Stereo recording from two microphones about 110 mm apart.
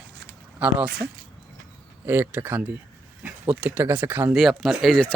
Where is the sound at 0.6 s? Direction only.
10° right (ahead or behind).